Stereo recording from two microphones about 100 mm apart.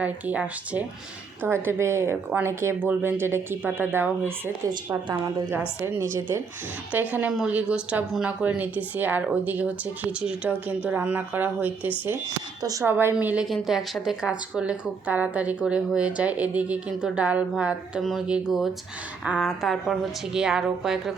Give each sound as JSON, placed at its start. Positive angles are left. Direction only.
{"t": 0.0, "sound": "a woman's voice", "side_deg": -15}
{"t": 5.5, "sound": "speech", "side_deg": -20}
{"t": 6.9, "sound": "a woman's voice", "side_deg": -15}
{"t": 13.5, "sound": "a woman's voice", "side_deg": 0}